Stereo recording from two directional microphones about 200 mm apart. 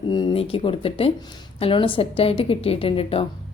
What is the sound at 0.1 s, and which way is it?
Speech, 25° left (ahead or behind).